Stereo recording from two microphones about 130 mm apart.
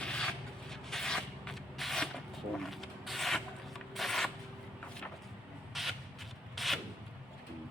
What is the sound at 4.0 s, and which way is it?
Shuffling cards, centre (ahead or behind).